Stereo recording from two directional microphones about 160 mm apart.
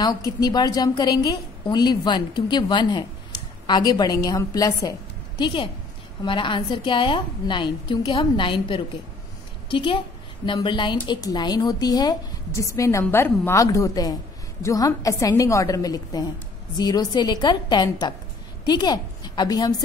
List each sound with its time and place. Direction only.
0.0 s a woman's voice: 25° left (ahead or behind)